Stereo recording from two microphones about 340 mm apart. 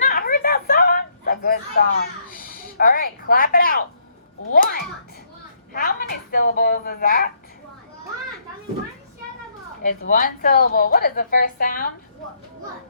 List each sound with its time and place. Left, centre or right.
0.0 s a sound: left
4.5 s a woman's voice: left
10.1 s a woman's voice: left